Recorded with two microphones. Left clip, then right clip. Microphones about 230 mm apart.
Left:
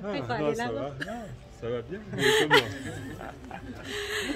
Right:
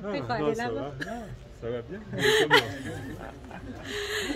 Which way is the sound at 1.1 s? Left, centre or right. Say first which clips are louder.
Right 1 dB; left.